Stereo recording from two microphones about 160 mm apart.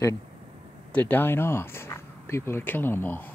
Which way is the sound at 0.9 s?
10° left (ahead or behind).